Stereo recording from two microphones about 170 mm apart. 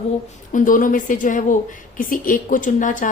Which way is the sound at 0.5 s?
55° left (ahead or behind).